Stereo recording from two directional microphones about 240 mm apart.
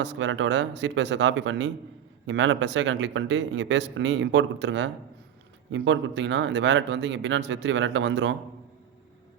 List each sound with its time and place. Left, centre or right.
0.0 s speech: right